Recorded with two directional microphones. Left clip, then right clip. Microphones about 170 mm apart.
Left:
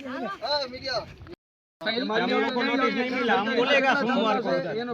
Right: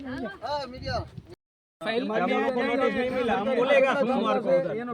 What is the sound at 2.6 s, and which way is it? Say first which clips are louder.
Speech: even; 30° right (ahead or behind).